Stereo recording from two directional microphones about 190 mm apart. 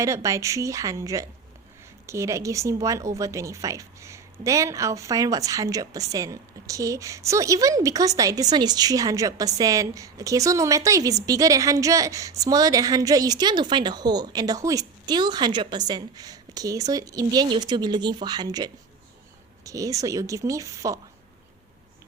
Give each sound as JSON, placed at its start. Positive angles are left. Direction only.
{"t": 0.0, "sound": "a woman's voice", "side_deg": -15}